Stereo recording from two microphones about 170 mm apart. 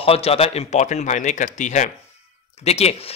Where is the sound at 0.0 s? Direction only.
35° left (ahead or behind).